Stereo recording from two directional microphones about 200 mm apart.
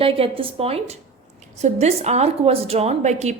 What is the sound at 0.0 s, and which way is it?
A woman's voice, 25° right (ahead or behind).